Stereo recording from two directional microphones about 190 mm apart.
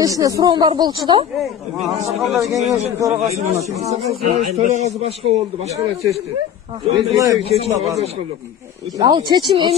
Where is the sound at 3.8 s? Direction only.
35° right (ahead or behind).